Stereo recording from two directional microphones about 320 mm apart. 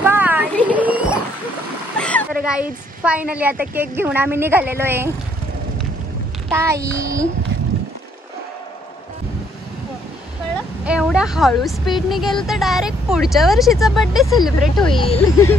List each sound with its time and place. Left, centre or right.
0.0 s a sound: centre
3.7 s speech: centre
6.5 s speech: centre
10.9 s a woman's voice: centre
14.9 s speech: centre